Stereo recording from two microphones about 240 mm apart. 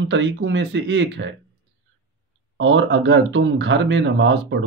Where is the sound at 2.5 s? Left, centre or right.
Right.